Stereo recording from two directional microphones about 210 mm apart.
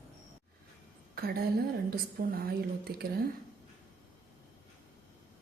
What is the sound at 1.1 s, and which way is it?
Speech, 45° right (ahead or behind).